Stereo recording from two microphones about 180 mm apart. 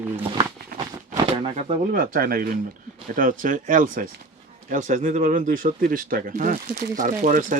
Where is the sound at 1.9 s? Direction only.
55° right (ahead or behind).